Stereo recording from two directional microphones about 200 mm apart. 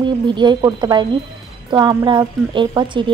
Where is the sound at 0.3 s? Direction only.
20° right (ahead or behind).